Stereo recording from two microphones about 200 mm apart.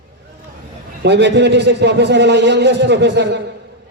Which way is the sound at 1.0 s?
60° right (ahead or behind).